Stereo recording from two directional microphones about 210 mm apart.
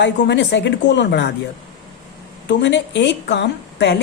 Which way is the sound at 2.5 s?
55° left (ahead or behind).